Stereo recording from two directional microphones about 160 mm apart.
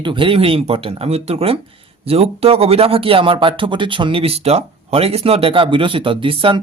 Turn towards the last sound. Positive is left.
turn(degrees=-35)  # may be behind; listen again after turning